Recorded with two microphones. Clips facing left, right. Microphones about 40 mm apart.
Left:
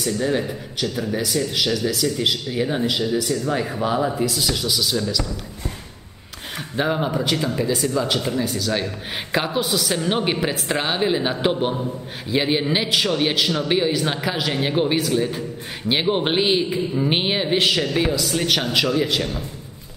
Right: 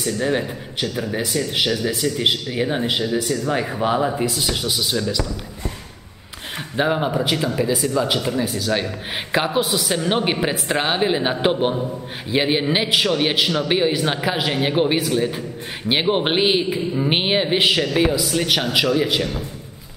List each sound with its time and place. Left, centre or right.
0.0 s speech: centre
6.8 s speech: centre